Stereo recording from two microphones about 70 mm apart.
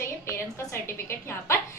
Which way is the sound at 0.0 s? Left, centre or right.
Left.